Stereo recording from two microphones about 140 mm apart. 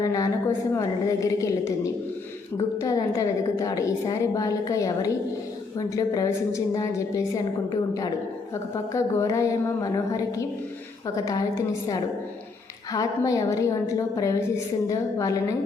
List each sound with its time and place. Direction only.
0.0 s a woman's voice: 25° left (ahead or behind)